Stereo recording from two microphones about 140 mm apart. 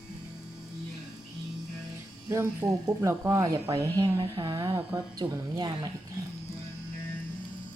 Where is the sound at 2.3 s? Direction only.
20° right (ahead or behind).